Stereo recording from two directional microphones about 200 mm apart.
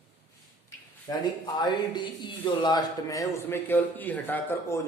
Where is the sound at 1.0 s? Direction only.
20° left (ahead or behind).